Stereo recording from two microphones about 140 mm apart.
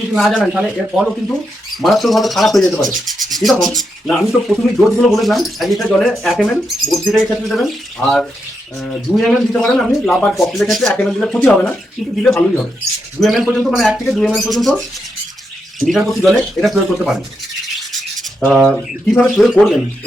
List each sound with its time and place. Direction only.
0.1 s speech: centre (ahead or behind)
17.7 s rub: centre (ahead or behind)
18.4 s speech: centre (ahead or behind)